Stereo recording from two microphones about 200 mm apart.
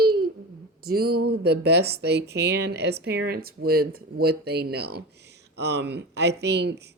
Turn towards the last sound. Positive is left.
turn(degrees=-55)  # may be behind; listen again after turning